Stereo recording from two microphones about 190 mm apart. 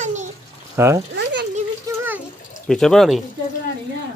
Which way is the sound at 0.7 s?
15° right (ahead or behind).